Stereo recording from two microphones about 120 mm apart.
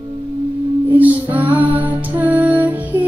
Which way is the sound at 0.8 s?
15° right (ahead or behind).